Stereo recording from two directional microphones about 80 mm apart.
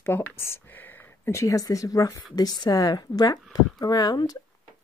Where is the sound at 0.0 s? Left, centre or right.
Left.